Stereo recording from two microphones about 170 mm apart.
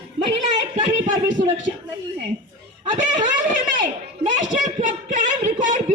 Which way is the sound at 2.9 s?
45° right (ahead or behind).